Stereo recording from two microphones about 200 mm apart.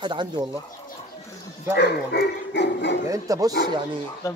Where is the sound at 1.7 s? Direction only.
60° left (ahead or behind).